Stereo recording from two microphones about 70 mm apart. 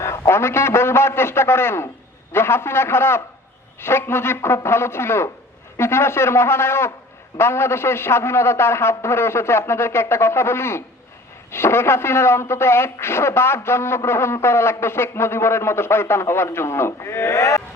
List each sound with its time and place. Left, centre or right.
0.0 s a man's voice: left